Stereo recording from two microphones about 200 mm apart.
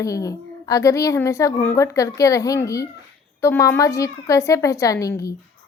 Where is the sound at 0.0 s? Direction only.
15° left (ahead or behind).